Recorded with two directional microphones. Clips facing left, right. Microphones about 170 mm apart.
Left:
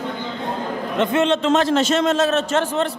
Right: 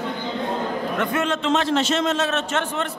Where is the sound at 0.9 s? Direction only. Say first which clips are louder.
Left 7 dB; 25° left (ahead or behind).